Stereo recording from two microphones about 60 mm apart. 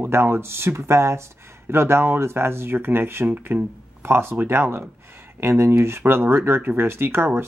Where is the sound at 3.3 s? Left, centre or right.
Right.